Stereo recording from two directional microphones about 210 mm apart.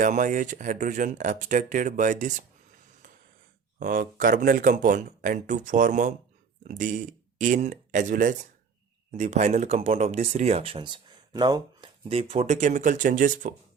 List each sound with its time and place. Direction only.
0.0 s speech: 40° right (ahead or behind)
3.8 s speech: 40° right (ahead or behind)